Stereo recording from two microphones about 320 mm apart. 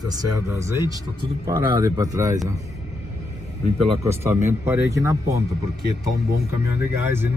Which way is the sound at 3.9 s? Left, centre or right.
Centre.